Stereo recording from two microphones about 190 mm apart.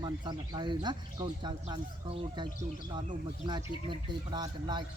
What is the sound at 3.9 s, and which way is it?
Speech, 25° right (ahead or behind).